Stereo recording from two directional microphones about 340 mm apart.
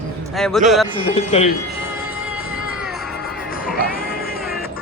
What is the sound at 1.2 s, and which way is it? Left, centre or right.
Yodeling, centre.